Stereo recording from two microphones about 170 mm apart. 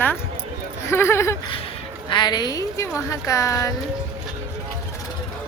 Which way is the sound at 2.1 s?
25° left (ahead or behind).